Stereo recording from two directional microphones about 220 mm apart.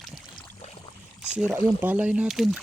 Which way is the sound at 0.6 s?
30° left (ahead or behind).